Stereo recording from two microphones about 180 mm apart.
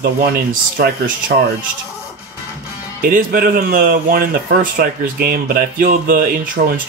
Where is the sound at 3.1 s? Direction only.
50° right (ahead or behind).